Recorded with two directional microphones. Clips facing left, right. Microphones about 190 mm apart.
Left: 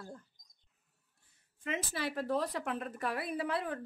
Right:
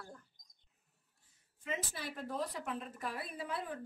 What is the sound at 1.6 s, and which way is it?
A woman's voice, 75° left (ahead or behind).